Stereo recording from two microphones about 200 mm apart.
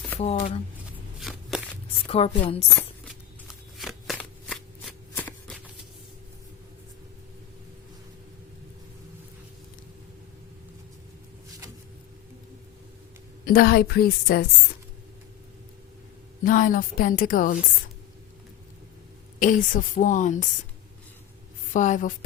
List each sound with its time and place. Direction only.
0.2 s a woman's voice: 35° left (ahead or behind)
1.2 s walk: centre (ahead or behind)
2.0 s a woman's voice: 30° left (ahead or behind)
3.8 s shuffling cards: centre (ahead or behind)
13.4 s a woman's voice: 45° left (ahead or behind)
16.4 s a woman's voice: 45° left (ahead or behind)
19.4 s a woman's voice: 40° left (ahead or behind)
21.7 s a woman's voice: 40° left (ahead or behind)